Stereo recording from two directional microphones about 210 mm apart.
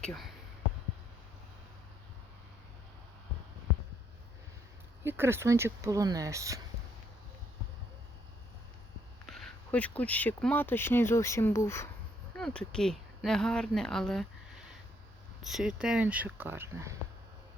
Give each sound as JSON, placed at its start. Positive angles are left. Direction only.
{"t": 0.0, "sound": "speech", "side_deg": 0}
{"t": 5.0, "sound": "speech", "side_deg": -10}
{"t": 9.2, "sound": "speech", "side_deg": 5}
{"t": 15.4, "sound": "speech", "side_deg": -5}